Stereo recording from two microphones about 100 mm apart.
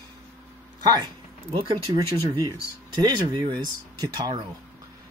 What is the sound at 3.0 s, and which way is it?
Speech, 45° right (ahead or behind).